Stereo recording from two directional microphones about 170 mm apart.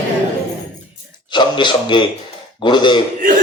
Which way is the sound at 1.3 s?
25° left (ahead or behind).